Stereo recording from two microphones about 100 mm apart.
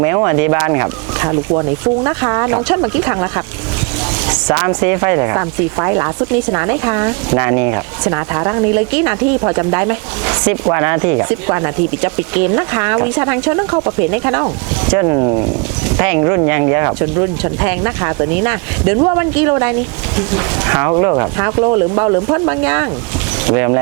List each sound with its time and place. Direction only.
0.0 s speech: 25° right (ahead or behind)
16.0 s speech: 25° right (ahead or behind)